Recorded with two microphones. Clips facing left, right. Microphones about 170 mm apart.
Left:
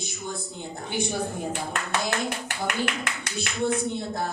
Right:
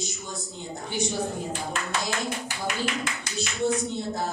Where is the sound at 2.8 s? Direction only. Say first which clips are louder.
Right 1 dB; 55° left (ahead or behind).